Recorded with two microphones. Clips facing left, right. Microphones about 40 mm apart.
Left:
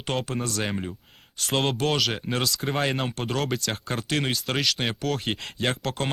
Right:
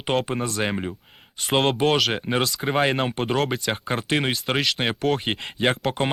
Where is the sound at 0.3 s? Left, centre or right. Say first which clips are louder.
Right 3 dB; centre.